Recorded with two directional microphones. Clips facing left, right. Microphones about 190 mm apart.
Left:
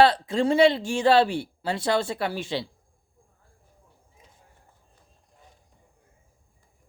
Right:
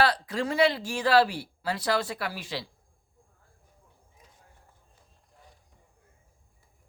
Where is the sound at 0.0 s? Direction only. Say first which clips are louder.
Left 6 dB; 25° left (ahead or behind).